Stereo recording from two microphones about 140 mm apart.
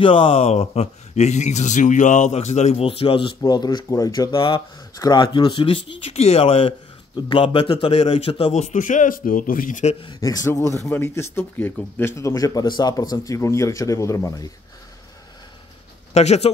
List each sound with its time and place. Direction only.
0.0 s speech: 40° left (ahead or behind)
3.3 s speech: 25° left (ahead or behind); by 9.9 s 65° left (ahead or behind)
10.0 s speech: 25° left (ahead or behind)
16.1 s speech: 50° left (ahead or behind)